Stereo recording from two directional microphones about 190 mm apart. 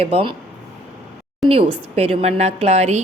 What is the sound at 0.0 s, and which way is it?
Speech, 30° right (ahead or behind).